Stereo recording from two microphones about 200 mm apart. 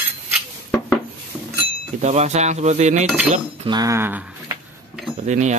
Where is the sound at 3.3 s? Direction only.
25° right (ahead or behind); by 5.1 s 5° right (ahead or behind).